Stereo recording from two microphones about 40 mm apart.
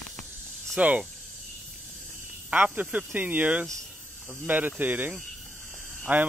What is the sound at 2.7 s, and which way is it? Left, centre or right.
Speech, right.